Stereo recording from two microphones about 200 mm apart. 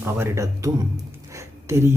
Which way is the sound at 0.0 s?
10° right (ahead or behind).